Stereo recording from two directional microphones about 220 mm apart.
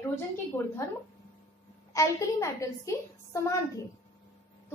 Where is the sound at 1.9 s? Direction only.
15° left (ahead or behind).